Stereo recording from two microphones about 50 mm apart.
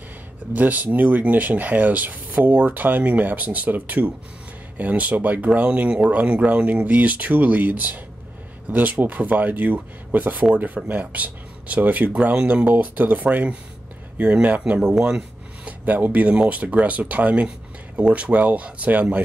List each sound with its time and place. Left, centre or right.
0.6 s speech: right; by 15.1 s centre
15.1 s speech: right